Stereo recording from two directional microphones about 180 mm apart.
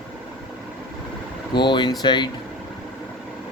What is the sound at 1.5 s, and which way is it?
Speech, 25° left (ahead or behind).